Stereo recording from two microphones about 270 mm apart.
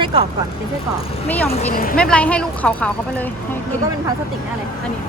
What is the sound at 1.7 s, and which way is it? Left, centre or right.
Speech, left.